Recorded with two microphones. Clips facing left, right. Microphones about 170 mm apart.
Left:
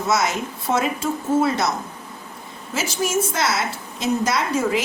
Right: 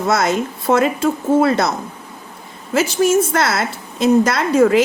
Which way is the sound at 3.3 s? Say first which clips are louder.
Right 5 dB; 60° right (ahead or behind).